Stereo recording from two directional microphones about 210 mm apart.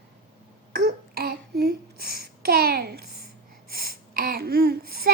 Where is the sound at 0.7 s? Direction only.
45° right (ahead or behind).